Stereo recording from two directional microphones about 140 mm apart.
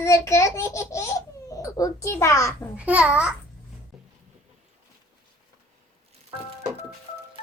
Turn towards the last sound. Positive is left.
turn(degrees=45)  # may be behind; listen again after turning